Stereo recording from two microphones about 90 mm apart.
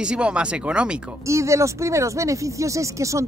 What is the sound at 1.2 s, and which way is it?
Speech, 35° right (ahead or behind).